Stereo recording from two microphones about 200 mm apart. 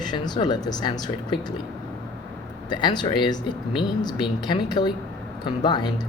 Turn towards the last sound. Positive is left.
turn(degrees=20)  # may be behind; listen again after turning